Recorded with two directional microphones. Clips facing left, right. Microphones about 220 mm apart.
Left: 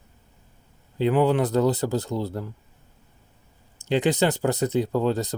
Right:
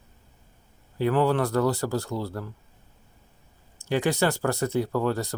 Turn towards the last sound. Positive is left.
turn(degrees=20)  # may be behind; listen again after turning